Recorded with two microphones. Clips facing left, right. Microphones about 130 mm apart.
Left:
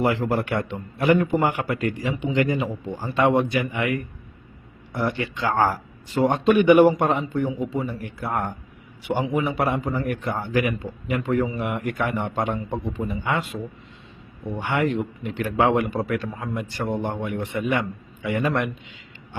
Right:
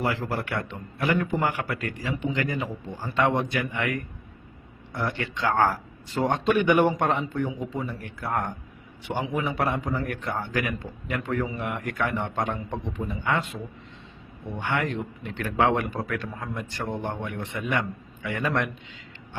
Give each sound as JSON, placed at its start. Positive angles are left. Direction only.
{"t": 0.0, "sound": "a man's voice", "side_deg": 25}
{"t": 4.9, "sound": "speech", "side_deg": 10}
{"t": 14.6, "sound": "speech", "side_deg": 10}